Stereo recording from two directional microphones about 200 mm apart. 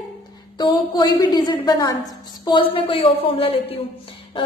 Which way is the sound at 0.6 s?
20° left (ahead or behind).